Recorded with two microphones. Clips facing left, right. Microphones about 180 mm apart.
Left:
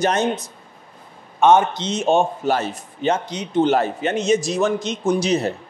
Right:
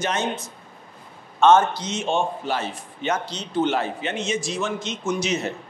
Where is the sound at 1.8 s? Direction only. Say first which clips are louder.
Left 6 dB; 40° left (ahead or behind).